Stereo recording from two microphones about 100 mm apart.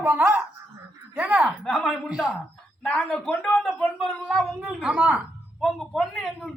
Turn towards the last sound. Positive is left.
turn(degrees=5)  # may be behind; listen again after turning